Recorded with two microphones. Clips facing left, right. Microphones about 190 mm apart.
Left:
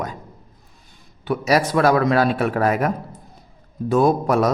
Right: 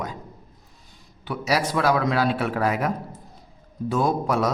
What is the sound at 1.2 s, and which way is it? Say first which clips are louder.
Speech: left 5 dB; 50° left (ahead or behind).